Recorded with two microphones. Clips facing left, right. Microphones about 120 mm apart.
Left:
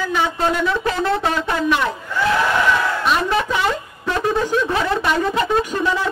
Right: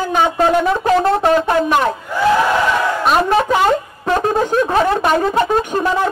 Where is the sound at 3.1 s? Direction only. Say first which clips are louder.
Right 6 dB; 45° right (ahead or behind).